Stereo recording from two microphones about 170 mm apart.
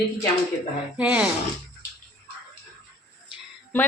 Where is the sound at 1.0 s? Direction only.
5° right (ahead or behind).